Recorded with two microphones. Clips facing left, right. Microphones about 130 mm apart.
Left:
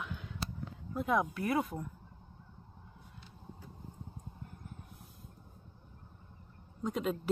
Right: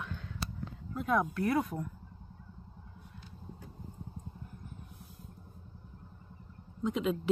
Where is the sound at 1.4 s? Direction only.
5° left (ahead or behind).